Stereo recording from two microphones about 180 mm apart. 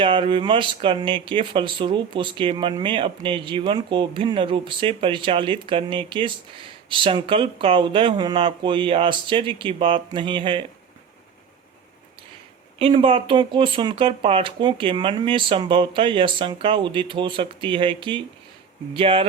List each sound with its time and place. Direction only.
0.0 s speech: 30° right (ahead or behind)
12.8 s speech: 30° right (ahead or behind)